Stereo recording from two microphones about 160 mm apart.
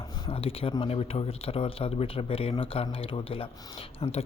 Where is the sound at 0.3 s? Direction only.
35° left (ahead or behind).